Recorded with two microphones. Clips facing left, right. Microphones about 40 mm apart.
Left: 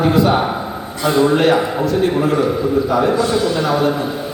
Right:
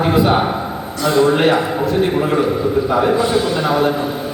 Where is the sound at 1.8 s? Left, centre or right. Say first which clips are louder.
Even; right.